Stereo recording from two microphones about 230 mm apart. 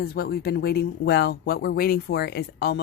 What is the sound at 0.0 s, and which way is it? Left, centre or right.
Speech, left.